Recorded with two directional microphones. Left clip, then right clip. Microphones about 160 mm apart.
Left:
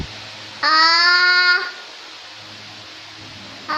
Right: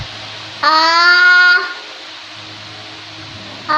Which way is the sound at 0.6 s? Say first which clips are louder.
Right 3 dB; 15° left (ahead or behind).